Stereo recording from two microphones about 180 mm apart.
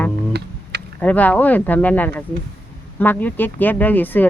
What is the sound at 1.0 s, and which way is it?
Speech, 10° left (ahead or behind).